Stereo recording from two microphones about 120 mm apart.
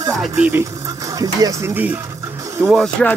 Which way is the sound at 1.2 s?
30° right (ahead or behind).